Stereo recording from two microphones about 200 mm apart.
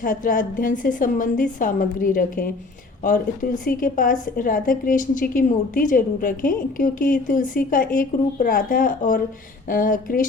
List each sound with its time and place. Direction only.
0.0 s a woman's voice: 45° left (ahead or behind)